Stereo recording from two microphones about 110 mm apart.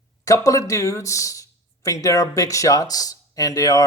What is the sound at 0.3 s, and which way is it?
Speech, 30° left (ahead or behind).